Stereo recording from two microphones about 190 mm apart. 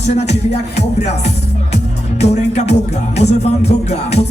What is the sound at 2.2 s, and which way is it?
Music, 35° left (ahead or behind).